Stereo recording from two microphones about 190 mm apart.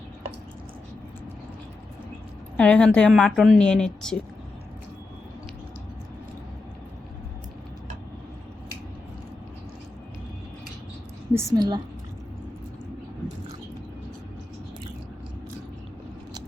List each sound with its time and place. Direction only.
2.6 s a woman's voice: 5° left (ahead or behind)
11.5 s a woman's voice: 20° right (ahead or behind)